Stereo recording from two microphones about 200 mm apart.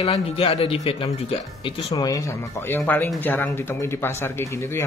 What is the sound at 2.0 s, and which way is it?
Speech, 15° left (ahead or behind).